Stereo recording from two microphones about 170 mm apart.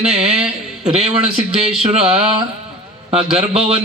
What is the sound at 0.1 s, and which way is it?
Speech, 40° right (ahead or behind).